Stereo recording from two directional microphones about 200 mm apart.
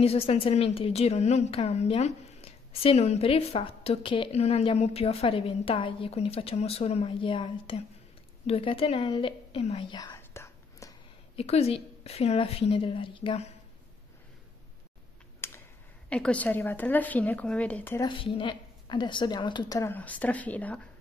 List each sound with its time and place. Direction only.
0.0 s a woman's voice: 30° left (ahead or behind); by 10.9 s 15° left (ahead or behind)
11.3 s a woman's voice: 30° left (ahead or behind)
15.4 s a sound: 15° left (ahead or behind)
16.1 s speech: 5° left (ahead or behind)
18.0 s a woman's voice: 25° left (ahead or behind); by 20.8 s 10° left (ahead or behind)